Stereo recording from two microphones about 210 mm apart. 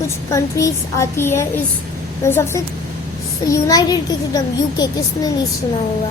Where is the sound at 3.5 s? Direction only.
15° left (ahead or behind).